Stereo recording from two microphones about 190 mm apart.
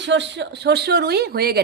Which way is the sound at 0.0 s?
70° right (ahead or behind).